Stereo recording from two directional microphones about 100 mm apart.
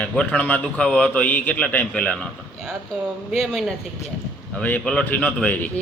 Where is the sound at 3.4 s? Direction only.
Centre (ahead or behind).